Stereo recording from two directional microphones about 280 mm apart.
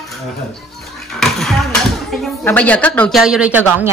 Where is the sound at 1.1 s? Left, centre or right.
Centre.